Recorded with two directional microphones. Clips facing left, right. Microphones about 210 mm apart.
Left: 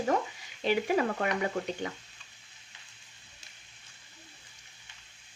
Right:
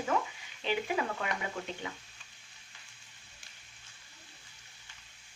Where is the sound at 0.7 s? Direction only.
45° left (ahead or behind).